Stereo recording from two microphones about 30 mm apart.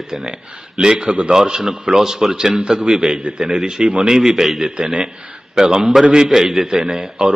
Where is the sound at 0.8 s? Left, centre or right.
Right.